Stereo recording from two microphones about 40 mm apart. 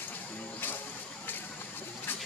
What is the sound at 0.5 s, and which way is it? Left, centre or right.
Vehicle, left.